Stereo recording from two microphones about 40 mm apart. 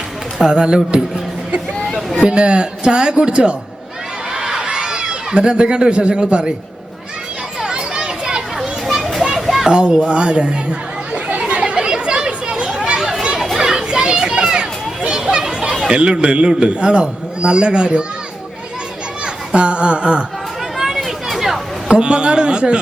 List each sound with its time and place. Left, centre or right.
0.4 s a man's voice: right
2.0 s a sound: centre
2.2 s a man's voice: right
4.4 s a sound: centre
7.6 s children playing: centre
8.5 s children playing: centre
9.6 s a child's voice: right
11.3 s chatter: right
13.6 s children playing: centre
15.8 s a man's voice: right
19.2 s a sound: right
20.7 s a sound: centre
21.8 s a man's voice: right